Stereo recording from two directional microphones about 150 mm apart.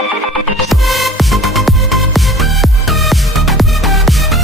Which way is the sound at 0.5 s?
Centre (ahead or behind).